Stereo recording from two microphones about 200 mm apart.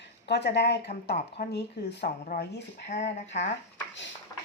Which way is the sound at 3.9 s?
65° left (ahead or behind).